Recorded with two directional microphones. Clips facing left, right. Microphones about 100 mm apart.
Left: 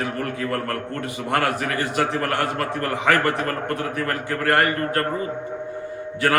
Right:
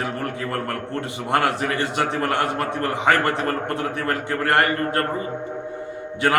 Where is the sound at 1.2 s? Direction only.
25° right (ahead or behind).